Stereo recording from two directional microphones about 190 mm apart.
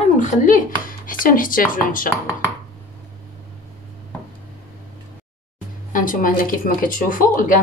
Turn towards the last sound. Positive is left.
turn(degrees=45)  # may be behind; listen again after turning